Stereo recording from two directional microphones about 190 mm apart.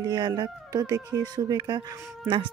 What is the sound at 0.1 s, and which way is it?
Speech, 20° right (ahead or behind).